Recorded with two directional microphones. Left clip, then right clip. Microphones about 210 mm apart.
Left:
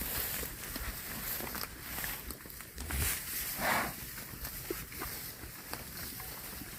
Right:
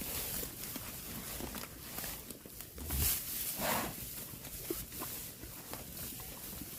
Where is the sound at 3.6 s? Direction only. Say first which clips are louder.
Left 4 dB; 35° right (ahead or behind).